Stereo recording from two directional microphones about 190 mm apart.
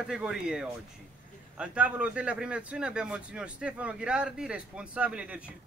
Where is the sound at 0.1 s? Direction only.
5° right (ahead or behind).